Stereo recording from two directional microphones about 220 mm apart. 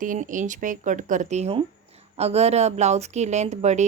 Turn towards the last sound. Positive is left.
turn(degrees=-30)  # may be behind; listen again after turning